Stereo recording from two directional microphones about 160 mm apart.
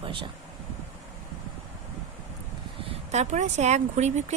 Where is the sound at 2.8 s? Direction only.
45° right (ahead or behind).